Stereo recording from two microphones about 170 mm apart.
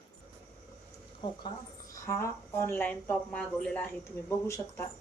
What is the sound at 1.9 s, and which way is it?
Speech, 15° left (ahead or behind).